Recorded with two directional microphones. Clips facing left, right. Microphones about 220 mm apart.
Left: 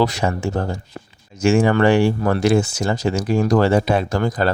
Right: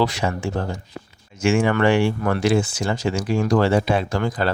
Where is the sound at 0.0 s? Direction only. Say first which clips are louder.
Left 2 dB; 40° left (ahead or behind).